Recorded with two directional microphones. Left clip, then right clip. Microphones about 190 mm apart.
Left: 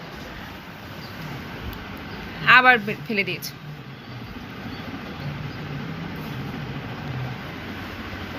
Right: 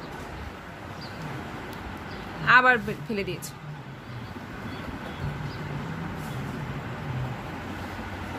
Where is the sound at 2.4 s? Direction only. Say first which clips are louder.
Left 4 dB; centre (ahead or behind).